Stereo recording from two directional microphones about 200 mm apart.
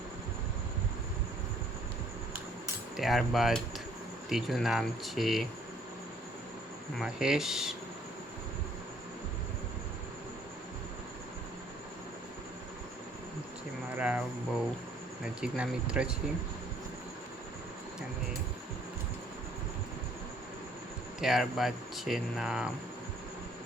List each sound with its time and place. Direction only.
3.0 s speech: centre (ahead or behind)
7.0 s speech: 5° right (ahead or behind)
13.9 s a sound: 5° right (ahead or behind)
15.4 s speech: 5° right (ahead or behind)
21.2 s speech: centre (ahead or behind)